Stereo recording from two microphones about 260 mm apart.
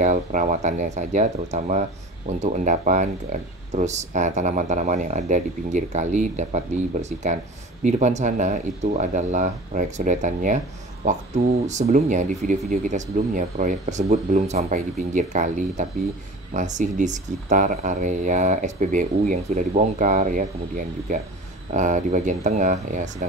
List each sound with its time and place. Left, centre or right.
0.0 s speech: right